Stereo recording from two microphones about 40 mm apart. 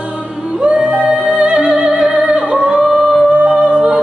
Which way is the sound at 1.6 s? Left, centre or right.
Right.